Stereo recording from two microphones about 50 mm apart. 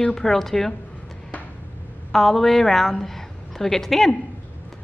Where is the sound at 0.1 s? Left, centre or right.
Centre.